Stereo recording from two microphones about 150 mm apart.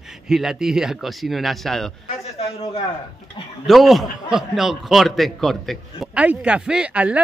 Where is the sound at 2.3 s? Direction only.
40° left (ahead or behind).